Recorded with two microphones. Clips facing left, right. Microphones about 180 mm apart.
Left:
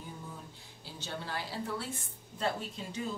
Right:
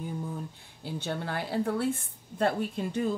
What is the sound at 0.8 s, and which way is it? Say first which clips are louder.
A woman's voice: right 8 dB; 55° right (ahead or behind).